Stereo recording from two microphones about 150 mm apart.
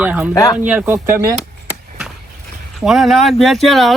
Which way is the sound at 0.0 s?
10° right (ahead or behind).